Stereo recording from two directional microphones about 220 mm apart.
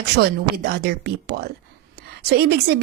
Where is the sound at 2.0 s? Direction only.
45° right (ahead or behind).